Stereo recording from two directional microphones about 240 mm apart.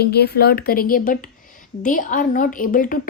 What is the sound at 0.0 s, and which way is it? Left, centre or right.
A woman's voice, left.